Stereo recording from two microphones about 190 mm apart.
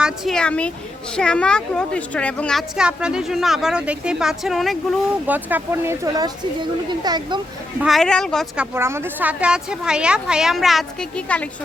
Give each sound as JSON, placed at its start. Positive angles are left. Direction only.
{"t": 0.0, "sound": "a woman's voice", "side_deg": 5}
{"t": 7.8, "sound": "a woman's voice", "side_deg": 0}
{"t": 8.7, "sound": "a woman's voice", "side_deg": -15}